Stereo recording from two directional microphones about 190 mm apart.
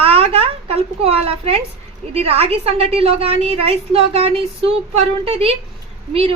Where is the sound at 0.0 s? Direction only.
30° right (ahead or behind).